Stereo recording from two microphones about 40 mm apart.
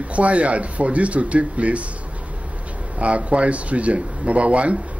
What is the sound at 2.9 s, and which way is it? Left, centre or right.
A man's voice, right.